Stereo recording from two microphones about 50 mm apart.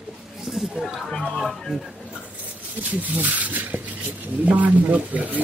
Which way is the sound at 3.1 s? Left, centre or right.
Right.